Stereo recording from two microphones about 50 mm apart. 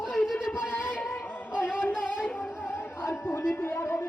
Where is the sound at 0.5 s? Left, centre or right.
Left.